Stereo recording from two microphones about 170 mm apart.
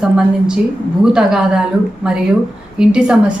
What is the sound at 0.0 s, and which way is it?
A woman's voice, 5° right (ahead or behind).